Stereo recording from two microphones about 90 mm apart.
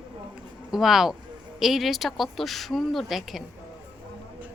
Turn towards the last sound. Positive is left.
turn(degrees=0)  # may be behind; listen again after turning